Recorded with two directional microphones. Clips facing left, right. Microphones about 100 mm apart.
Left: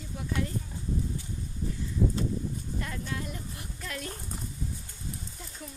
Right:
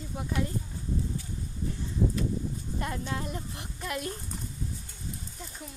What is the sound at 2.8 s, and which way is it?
A woman's voice, 30° right (ahead or behind).